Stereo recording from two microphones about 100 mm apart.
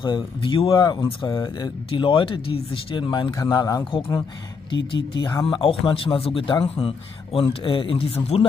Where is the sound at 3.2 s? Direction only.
40° left (ahead or behind).